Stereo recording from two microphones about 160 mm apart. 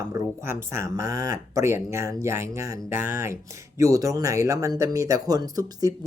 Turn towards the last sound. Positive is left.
turn(degrees=-25)  # may be behind; listen again after turning